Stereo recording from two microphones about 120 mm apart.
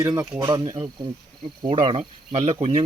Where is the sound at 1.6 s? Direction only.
45° right (ahead or behind).